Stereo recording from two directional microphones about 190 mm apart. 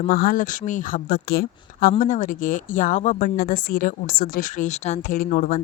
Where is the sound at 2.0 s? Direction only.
40° left (ahead or behind).